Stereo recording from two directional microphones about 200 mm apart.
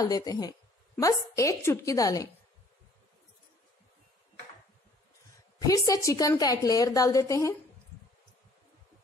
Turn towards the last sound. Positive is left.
turn(degrees=15)  # may be behind; listen again after turning